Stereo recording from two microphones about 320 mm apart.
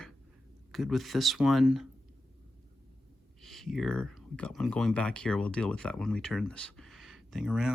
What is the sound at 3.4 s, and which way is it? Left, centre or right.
Speech, centre.